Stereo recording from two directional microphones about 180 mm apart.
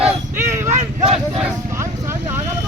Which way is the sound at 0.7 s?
40° right (ahead or behind).